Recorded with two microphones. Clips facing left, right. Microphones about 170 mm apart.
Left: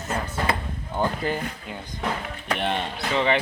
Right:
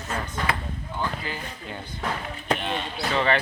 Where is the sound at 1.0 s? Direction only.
50° left (ahead or behind).